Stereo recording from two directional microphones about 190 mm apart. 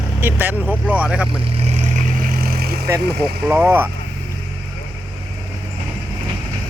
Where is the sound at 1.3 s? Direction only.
30° right (ahead or behind); by 2.8 s 55° right (ahead or behind).